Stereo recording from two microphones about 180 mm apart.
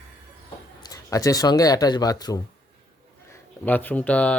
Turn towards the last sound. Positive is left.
turn(degrees=5)  # may be behind; listen again after turning